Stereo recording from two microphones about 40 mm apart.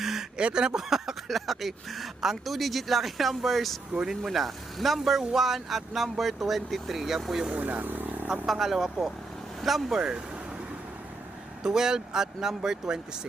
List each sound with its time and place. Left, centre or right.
0.0 s a sound: centre
0.3 s speech: right
7.5 s speech: right
8.4 s speech: centre
9.9 s speech: right
11.6 s speech: centre